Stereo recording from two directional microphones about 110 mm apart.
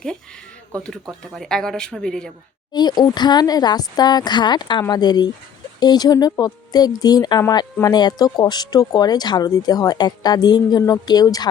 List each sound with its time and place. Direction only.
0.9 s speech: 5° left (ahead or behind)
2.7 s speech: 40° left (ahead or behind)